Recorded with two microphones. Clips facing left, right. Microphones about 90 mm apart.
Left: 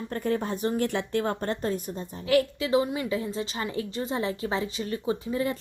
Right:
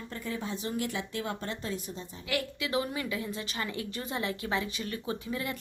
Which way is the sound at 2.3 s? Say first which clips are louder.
Left 10 dB; 30° left (ahead or behind).